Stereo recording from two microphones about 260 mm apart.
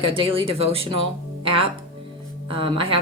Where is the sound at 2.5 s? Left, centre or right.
Centre.